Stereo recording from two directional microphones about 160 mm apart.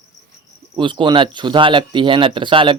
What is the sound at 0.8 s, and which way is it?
Speech, 30° right (ahead or behind).